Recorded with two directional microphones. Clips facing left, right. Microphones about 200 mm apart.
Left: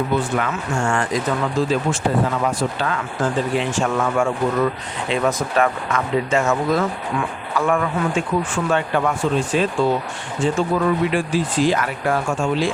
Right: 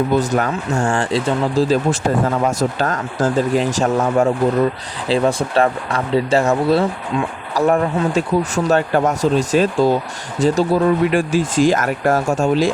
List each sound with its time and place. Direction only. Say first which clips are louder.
0.2 s speech: right 4 dB; 40° right (ahead or behind)